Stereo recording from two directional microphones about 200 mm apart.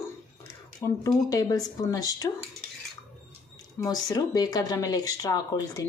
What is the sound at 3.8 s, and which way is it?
Speech, 20° left (ahead or behind).